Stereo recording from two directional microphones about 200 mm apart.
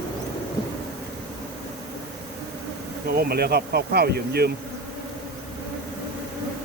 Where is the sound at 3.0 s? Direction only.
50° right (ahead or behind).